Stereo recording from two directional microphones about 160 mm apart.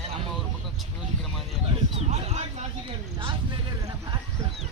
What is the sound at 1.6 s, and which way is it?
Speech, 40° right (ahead or behind).